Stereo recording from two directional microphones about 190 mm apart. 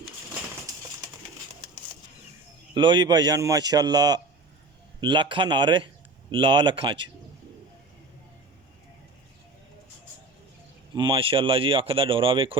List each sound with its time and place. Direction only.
2.7 s speech: 25° right (ahead or behind)
10.9 s speech: 25° right (ahead or behind)